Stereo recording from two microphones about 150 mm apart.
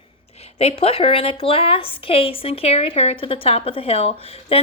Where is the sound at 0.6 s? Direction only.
40° left (ahead or behind).